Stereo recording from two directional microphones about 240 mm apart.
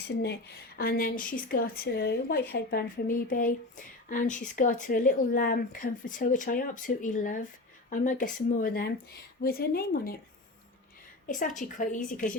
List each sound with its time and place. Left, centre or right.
0.8 s a woman's voice: left
11.3 s a woman's voice: left